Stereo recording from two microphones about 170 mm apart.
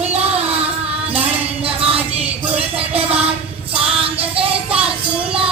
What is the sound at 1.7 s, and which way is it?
Music, 35° right (ahead or behind).